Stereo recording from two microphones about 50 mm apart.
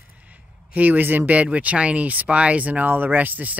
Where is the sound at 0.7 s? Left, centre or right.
Right.